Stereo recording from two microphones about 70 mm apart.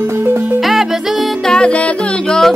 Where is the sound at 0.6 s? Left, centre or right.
Centre.